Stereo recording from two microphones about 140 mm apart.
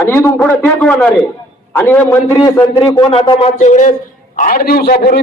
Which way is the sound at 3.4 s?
55° left (ahead or behind).